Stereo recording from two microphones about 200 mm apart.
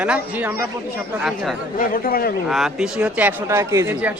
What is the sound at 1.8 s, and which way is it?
Speech, 45° left (ahead or behind).